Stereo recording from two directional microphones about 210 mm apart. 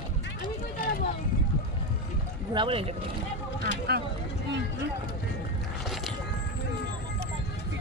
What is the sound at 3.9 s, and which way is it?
Speech, 50° right (ahead or behind).